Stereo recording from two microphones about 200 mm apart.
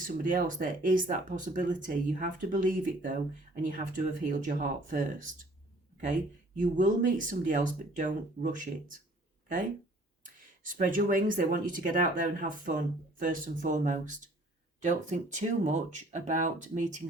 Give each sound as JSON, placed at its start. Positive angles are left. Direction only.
{"t": 0.2, "sound": "speech", "side_deg": -40}
{"t": 6.6, "sound": "speech", "side_deg": -40}
{"t": 10.2, "sound": "speech", "side_deg": -40}